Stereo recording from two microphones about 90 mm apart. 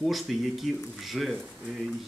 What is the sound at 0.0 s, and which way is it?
Speech, centre (ahead or behind).